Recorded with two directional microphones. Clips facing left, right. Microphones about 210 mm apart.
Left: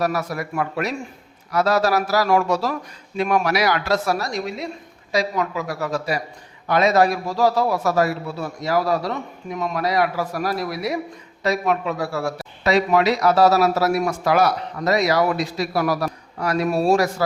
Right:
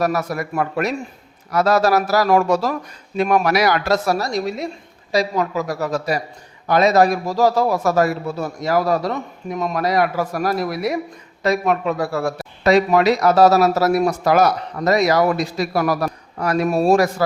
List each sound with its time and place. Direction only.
0.0 s a man's voice: 45° right (ahead or behind)